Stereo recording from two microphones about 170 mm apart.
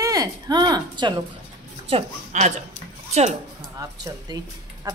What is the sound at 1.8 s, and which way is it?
Speech, 40° right (ahead or behind).